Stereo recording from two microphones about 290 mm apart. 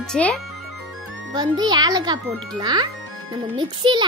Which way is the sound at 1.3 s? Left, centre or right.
Centre.